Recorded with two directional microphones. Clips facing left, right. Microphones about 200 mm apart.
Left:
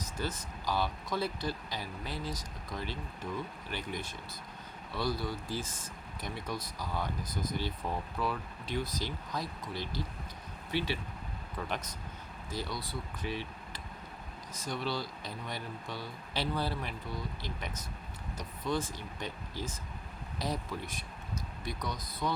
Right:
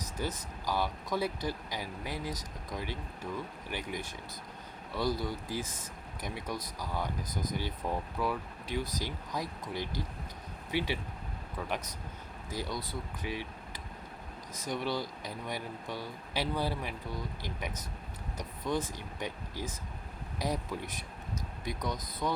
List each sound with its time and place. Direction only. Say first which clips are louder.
0.2 s speech: right 1 dB; 15° right (ahead or behind)
5.2 s speech: right 1 dB; 15° right (ahead or behind)
12.5 s speech: right 1 dB; 15° right (ahead or behind)